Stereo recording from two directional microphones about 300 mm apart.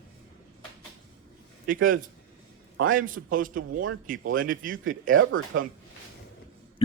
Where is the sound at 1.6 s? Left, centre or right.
Right.